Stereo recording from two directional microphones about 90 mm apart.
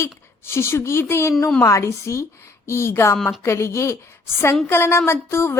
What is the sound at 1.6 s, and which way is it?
Speech, 35° left (ahead or behind).